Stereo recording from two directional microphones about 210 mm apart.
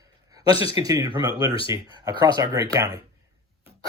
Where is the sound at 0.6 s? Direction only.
25° left (ahead or behind).